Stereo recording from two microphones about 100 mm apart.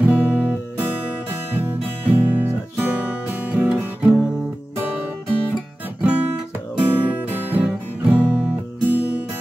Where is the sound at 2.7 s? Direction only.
15° right (ahead or behind).